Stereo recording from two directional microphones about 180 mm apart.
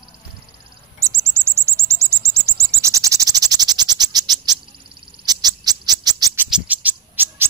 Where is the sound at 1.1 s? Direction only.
15° right (ahead or behind).